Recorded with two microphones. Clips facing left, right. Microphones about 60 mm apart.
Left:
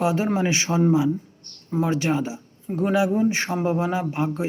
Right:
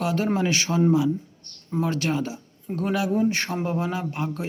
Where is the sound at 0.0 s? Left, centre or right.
Left.